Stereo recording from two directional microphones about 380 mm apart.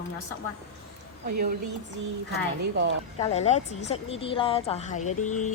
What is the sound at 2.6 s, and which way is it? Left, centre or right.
Speech, right.